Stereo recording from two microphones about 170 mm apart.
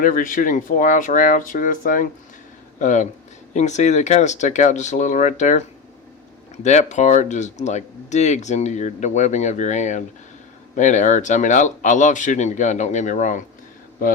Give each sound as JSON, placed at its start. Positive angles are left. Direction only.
{"t": 0.0, "sound": "speech", "side_deg": 50}